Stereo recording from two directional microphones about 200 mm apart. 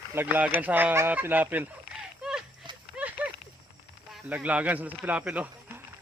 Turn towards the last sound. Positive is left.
turn(degrees=-5)  # may be behind; listen again after turning